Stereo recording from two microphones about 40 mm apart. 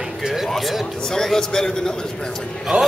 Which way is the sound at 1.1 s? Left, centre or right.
Centre.